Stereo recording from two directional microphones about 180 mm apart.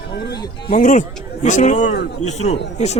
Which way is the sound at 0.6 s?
45° left (ahead or behind).